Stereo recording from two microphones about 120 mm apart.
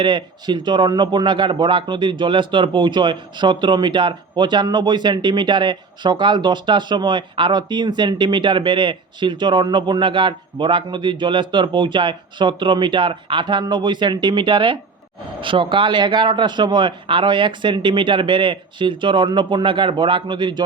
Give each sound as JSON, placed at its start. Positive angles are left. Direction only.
{"t": 0.0, "sound": "a man's voice", "side_deg": -40}